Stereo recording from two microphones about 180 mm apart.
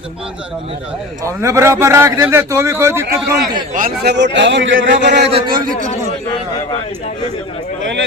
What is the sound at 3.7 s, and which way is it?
A man's voice, 55° right (ahead or behind).